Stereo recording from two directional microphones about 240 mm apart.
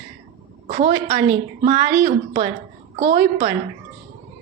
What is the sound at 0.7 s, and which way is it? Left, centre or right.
A woman's voice, right.